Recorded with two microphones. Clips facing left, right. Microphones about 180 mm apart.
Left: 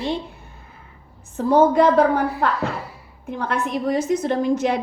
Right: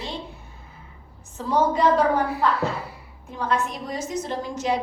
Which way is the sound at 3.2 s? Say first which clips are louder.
Left 1 dB; 60° left (ahead or behind).